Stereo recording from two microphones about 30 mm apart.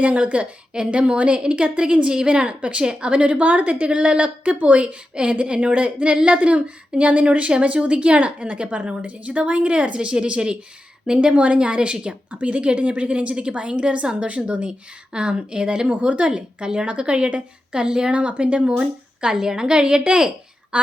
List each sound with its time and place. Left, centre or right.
0.0 s a woman's voice: right
1.4 s a woman's voice: right
3.8 s a woman's voice: right
4.4 s a woman's voice: right
5.1 s a woman's voice: right
11.3 s a woman's voice: right
11.6 s a woman's voice: right
12.3 s a woman's voice: right
13.3 s a woman's voice: right
16.0 s a woman's voice: right
18.1 s a woman's voice: right
18.8 s a woman's voice: right
20.7 s a woman's voice: right